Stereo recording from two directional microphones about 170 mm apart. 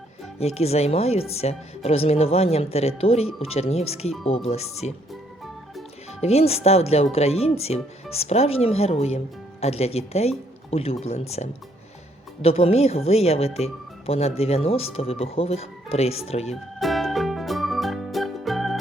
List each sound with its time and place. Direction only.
0.3 s speech: 35° left (ahead or behind)
6.2 s speech: 35° left (ahead or behind)
16.8 s music: centre (ahead or behind)